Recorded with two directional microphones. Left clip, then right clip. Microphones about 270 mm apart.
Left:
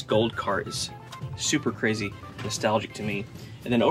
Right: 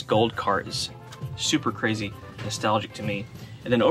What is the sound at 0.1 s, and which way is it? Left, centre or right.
Speech, centre.